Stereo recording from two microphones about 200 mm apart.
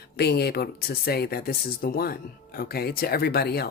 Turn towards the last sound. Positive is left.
turn(degrees=50)  # may be behind; listen again after turning